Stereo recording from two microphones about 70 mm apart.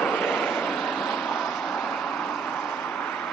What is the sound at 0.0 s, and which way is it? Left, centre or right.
Vehicle, centre.